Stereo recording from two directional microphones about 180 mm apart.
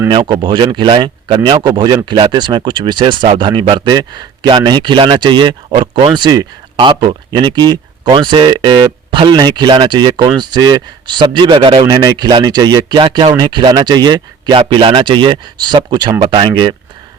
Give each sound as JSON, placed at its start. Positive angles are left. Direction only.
{"t": 0.1, "sound": "speech", "side_deg": -25}